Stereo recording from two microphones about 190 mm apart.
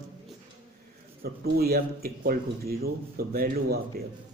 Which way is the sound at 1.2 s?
55° right (ahead or behind).